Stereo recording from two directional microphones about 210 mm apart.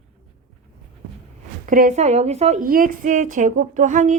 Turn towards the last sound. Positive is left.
turn(degrees=-35)  # may be behind; listen again after turning